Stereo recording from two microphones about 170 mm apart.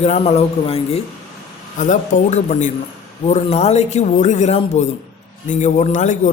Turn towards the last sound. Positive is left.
turn(degrees=45)  # may be behind; listen again after turning